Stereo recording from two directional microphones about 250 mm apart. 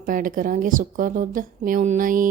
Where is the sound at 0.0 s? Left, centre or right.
Right.